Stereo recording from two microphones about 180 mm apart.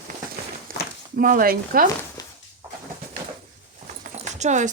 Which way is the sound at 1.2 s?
50° right (ahead or behind).